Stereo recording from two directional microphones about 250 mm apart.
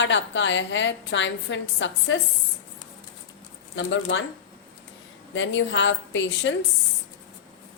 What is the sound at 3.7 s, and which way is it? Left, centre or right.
Speech, left.